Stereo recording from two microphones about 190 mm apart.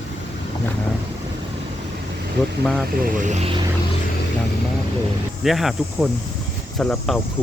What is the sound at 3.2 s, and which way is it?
Speech, 35° right (ahead or behind).